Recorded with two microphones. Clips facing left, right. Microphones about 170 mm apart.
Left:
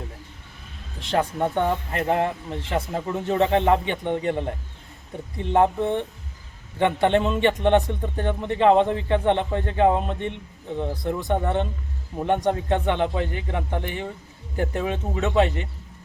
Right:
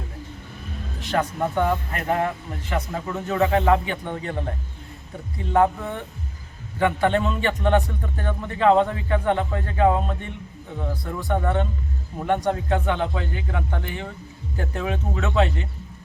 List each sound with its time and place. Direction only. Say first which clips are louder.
0.9 s a man's voice: left 1 dB; 25° left (ahead or behind)